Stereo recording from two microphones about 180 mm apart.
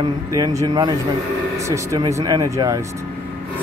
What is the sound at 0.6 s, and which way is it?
Speech, 20° right (ahead or behind).